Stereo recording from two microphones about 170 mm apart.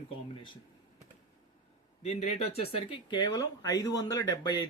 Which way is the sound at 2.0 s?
35° left (ahead or behind).